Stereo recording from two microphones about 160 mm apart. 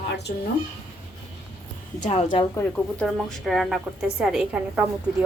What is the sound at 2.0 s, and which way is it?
Speech, 45° left (ahead or behind).